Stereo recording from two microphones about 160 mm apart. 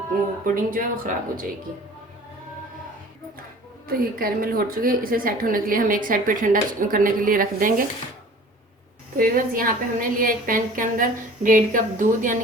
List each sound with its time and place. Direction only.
0.4 s a woman's voice: 60° right (ahead or behind)
3.8 s a woman's voice: 65° right (ahead or behind)
9.1 s a woman's voice: 60° right (ahead or behind)